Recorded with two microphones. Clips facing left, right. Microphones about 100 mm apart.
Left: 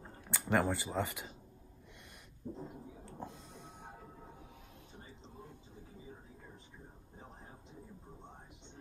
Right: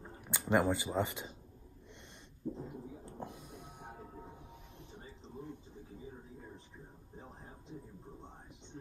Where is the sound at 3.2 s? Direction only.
15° right (ahead or behind).